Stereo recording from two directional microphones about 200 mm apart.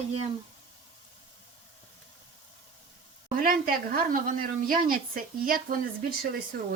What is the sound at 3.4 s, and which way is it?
Speech, 45° right (ahead or behind).